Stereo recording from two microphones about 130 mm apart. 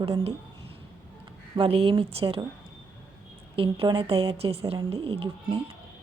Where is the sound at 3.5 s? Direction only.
45° right (ahead or behind).